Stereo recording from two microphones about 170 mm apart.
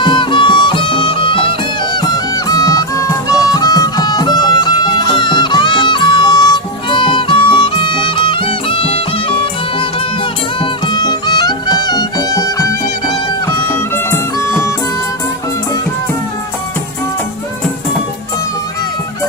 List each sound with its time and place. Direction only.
0.0 s music: 30° left (ahead or behind)
10.6 s music: 25° left (ahead or behind)